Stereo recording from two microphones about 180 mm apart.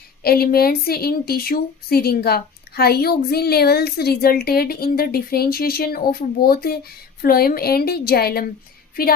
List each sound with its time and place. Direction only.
0.2 s speech: 60° left (ahead or behind)
9.0 s music: 55° left (ahead or behind)